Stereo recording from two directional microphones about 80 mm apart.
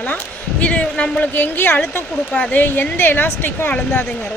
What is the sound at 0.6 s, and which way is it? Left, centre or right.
Speech, centre.